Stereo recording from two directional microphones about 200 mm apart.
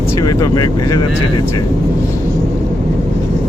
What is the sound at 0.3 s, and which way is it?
Speech, 20° left (ahead or behind).